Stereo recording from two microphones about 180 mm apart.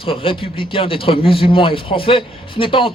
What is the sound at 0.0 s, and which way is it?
Speech, 30° left (ahead or behind).